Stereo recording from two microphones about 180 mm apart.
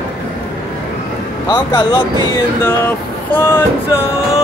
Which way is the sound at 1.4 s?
25° left (ahead or behind).